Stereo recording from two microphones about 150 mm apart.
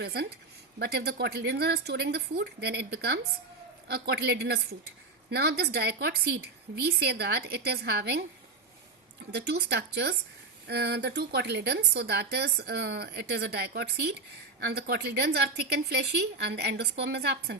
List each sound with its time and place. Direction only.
0.0 s a woman's voice: 90° right
9.3 s a woman's voice: 90° right